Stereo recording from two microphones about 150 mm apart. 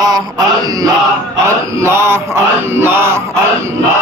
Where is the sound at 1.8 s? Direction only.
15° right (ahead or behind).